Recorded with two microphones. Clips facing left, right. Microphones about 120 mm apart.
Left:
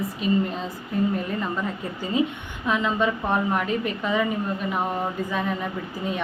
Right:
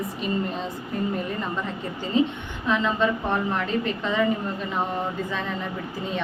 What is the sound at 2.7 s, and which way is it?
A woman's voice, 15° left (ahead or behind).